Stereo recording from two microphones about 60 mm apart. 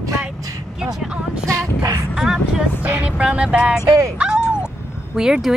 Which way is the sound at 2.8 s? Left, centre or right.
Right.